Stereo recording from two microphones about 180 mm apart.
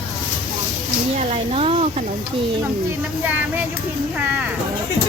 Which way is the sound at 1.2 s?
35° right (ahead or behind).